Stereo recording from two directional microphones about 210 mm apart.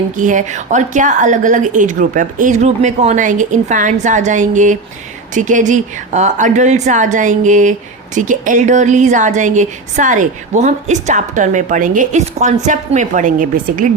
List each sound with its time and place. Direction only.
0.2 s a woman's voice: 35° right (ahead or behind)